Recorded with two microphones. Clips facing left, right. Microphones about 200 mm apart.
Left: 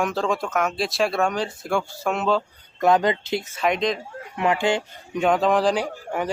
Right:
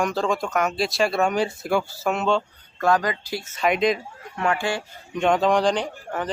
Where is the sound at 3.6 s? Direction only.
5° right (ahead or behind).